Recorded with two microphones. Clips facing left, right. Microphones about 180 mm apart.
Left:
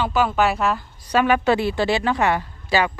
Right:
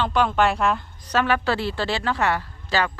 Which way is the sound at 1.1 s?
15° left (ahead or behind).